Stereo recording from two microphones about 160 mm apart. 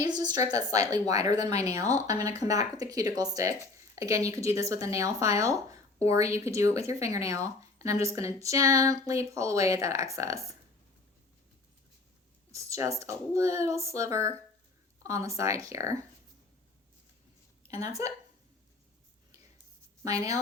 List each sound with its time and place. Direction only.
0.0 s a woman's voice: 25° right (ahead or behind)
1.3 s speech: 45° left (ahead or behind)
1.9 s speech: 20° right (ahead or behind)
12.7 s speech: 20° right (ahead or behind)
18.0 s speech: 20° right (ahead or behind)
20.1 s speech: 20° right (ahead or behind)